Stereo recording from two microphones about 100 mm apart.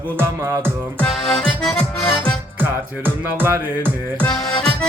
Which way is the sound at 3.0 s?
25° right (ahead or behind).